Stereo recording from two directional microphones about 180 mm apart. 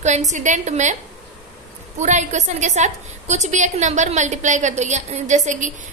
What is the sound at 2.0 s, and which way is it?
A woman's voice, 40° right (ahead or behind).